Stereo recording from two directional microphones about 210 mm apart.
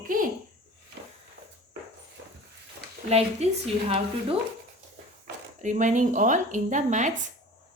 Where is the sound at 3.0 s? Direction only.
30° right (ahead or behind).